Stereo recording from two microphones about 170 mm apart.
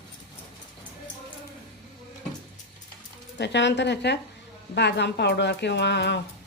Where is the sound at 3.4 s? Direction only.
90° left.